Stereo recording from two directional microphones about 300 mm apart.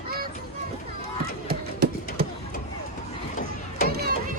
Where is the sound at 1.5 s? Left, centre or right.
Right.